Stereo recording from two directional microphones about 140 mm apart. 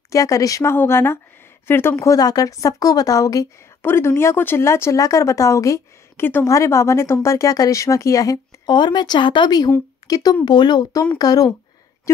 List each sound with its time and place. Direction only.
0.1 s speech: 25° left (ahead or behind)